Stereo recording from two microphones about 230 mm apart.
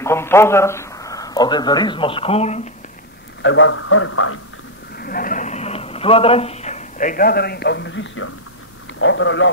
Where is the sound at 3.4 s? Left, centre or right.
Left.